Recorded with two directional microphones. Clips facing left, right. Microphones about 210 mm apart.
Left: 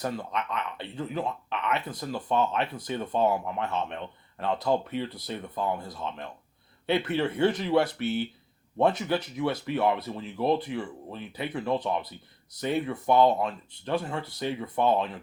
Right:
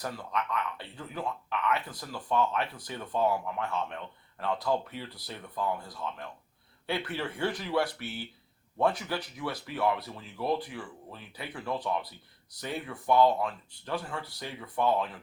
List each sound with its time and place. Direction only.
0.0 s speech: 25° left (ahead or behind)